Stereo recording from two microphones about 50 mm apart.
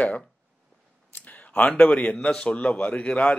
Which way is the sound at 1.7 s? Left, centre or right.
Centre.